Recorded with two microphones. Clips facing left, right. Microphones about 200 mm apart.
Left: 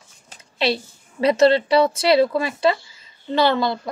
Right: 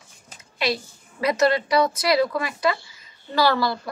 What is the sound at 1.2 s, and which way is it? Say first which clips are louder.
Speech: left 5 dB; 30° left (ahead or behind).